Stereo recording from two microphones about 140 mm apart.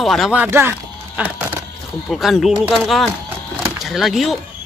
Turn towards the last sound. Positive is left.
turn(degrees=0)  # may be behind; listen again after turning